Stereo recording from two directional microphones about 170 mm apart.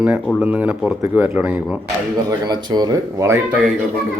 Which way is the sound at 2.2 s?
25° right (ahead or behind).